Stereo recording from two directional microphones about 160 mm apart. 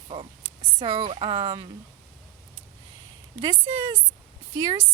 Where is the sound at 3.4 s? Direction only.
25° right (ahead or behind).